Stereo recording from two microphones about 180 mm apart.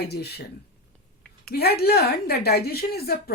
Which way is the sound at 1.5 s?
60° left (ahead or behind).